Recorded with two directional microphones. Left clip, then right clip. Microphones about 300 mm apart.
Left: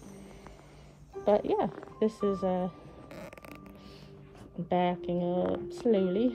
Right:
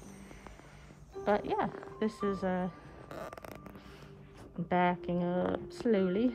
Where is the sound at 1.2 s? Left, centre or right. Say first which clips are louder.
Left 4 dB; right.